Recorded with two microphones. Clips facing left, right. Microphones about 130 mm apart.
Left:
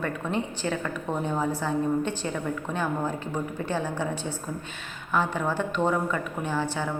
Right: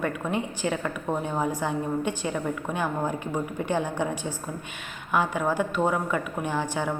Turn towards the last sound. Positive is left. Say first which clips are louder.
# right 1 dB
turn(degrees=-15)  # may be behind; listen again after turning